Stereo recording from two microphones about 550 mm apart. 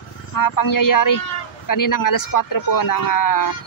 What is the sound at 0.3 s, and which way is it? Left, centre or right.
Speech, left.